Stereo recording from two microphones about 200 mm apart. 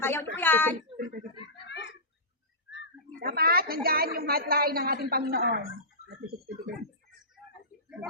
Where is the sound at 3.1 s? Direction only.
50° right (ahead or behind).